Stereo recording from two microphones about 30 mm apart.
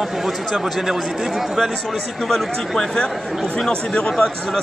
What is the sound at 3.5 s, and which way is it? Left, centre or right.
Speech, left.